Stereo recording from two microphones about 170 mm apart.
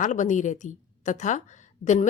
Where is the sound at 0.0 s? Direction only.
45° left (ahead or behind).